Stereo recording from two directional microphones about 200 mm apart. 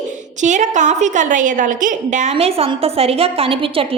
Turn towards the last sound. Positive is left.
turn(degrees=-25)  # may be behind; listen again after turning